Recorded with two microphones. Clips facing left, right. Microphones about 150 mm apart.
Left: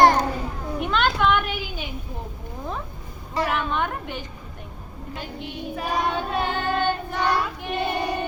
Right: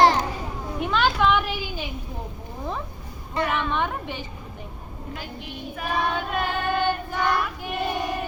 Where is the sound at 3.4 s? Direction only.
5° left (ahead or behind).